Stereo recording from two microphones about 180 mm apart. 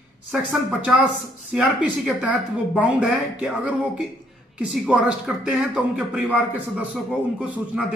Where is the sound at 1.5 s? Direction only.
5° right (ahead or behind).